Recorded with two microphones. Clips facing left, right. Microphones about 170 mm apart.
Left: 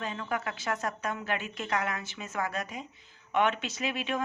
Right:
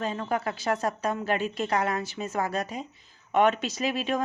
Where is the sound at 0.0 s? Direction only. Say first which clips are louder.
Right 5 dB; 35° right (ahead or behind).